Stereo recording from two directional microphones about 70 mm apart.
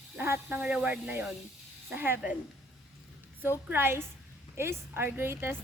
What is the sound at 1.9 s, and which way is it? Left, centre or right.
Speech, right.